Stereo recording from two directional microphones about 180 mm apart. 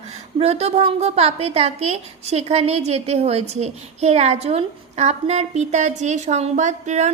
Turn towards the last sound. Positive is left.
turn(degrees=-40)  # may be behind; listen again after turning